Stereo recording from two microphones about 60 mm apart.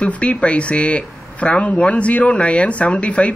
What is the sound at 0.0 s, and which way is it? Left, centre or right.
Speech, left.